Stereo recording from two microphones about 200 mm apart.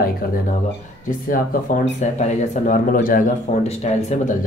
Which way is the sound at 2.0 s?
35° left (ahead or behind).